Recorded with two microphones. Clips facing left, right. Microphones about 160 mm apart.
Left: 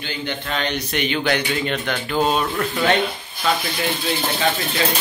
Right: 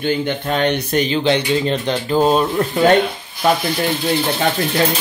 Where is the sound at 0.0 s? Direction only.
50° right (ahead or behind).